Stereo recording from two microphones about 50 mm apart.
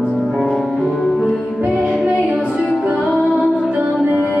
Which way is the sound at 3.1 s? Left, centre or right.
Centre.